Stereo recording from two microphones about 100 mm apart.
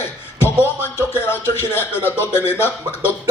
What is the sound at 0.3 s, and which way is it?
Speech, 25° left (ahead or behind).